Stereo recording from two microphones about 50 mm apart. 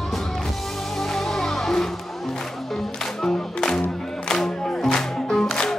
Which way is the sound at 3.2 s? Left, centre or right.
Centre.